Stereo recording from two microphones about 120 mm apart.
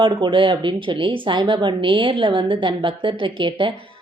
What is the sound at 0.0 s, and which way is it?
A woman's voice, 45° right (ahead or behind).